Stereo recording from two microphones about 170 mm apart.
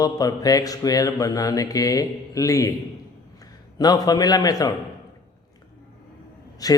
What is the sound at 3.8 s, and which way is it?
Speech, 25° left (ahead or behind).